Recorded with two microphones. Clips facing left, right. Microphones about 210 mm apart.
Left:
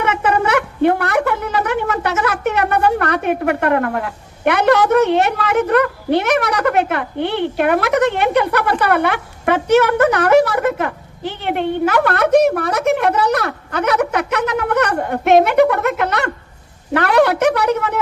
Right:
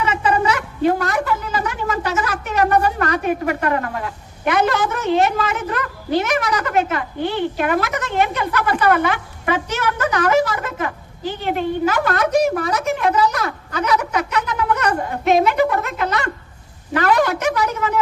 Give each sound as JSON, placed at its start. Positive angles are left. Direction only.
{"t": 0.0, "sound": "a woman's voice", "side_deg": 65}